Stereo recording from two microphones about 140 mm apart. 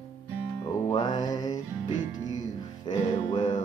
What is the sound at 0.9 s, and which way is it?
Music, 30° left (ahead or behind).